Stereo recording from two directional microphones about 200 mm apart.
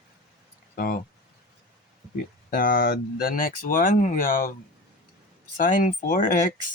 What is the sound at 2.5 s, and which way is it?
Speech, 45° left (ahead or behind).